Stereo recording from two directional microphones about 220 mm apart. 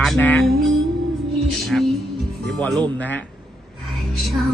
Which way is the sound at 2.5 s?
5° left (ahead or behind).